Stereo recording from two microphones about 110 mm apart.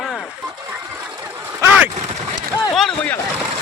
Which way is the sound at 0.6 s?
20° right (ahead or behind).